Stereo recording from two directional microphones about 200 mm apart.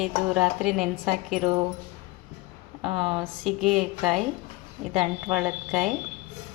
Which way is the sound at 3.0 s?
5° right (ahead or behind).